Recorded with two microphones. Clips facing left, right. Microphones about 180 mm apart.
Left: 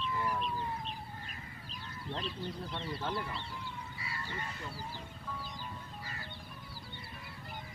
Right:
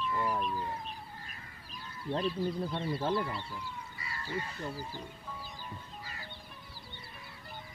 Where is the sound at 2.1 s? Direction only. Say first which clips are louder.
Right 8 dB; 40° right (ahead or behind).